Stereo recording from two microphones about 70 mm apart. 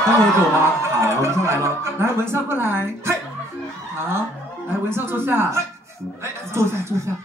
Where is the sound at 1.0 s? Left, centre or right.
Right.